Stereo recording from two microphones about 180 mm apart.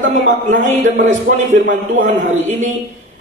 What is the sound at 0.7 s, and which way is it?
A man's voice, 45° right (ahead or behind).